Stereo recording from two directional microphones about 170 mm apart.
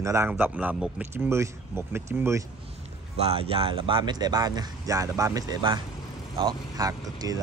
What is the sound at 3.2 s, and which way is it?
Speech, 35° right (ahead or behind).